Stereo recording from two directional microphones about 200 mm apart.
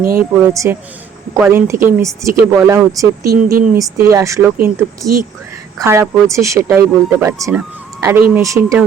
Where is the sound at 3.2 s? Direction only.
50° right (ahead or behind).